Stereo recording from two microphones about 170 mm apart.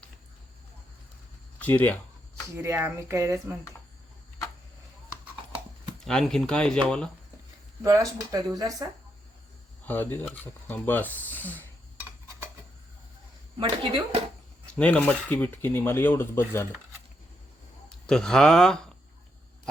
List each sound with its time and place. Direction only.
1.5 s speech: 10° left (ahead or behind)
2.6 s speech: 15° right (ahead or behind)
6.1 s speech: 5° left (ahead or behind)
7.8 s speech: 20° right (ahead or behind)
9.8 s speech: 10° left (ahead or behind)
13.6 s speech: 30° right (ahead or behind)
14.8 s speech: 10° left (ahead or behind)
17.8 s speech: 5° left (ahead or behind)